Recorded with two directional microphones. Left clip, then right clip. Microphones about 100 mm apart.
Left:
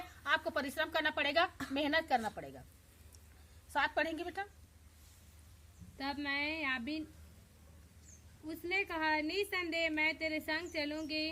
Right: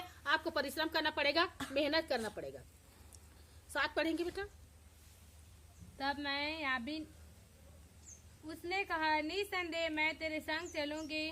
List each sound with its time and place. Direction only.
0.3 s a woman's voice: 45° right (ahead or behind)
3.7 s a woman's voice: 45° right (ahead or behind)
6.0 s a woman's voice: 5° left (ahead or behind)
8.4 s a woman's voice: centre (ahead or behind)